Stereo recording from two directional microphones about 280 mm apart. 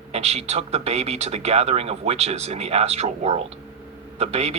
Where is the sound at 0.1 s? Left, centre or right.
Right.